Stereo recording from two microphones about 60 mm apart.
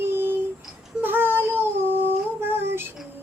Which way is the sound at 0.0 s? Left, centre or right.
Right.